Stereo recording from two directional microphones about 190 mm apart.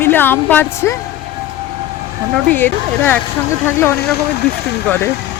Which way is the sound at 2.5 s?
10° left (ahead or behind).